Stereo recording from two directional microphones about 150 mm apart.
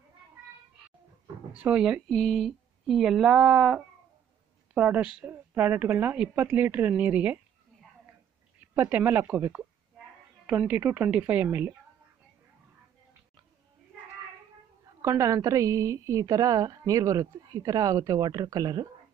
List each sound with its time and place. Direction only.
1.2 s a sound: 10° right (ahead or behind)
2.1 s a woman's voice: centre (ahead or behind)
8.7 s a woman's voice: 15° right (ahead or behind)
15.0 s a woman's voice: 20° right (ahead or behind)